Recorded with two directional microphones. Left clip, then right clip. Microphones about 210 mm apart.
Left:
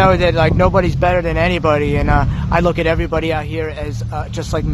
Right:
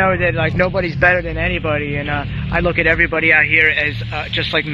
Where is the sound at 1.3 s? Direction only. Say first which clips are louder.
Left 4 dB; 45° left (ahead or behind).